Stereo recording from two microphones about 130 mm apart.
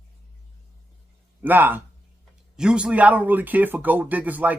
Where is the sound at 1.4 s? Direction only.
15° right (ahead or behind).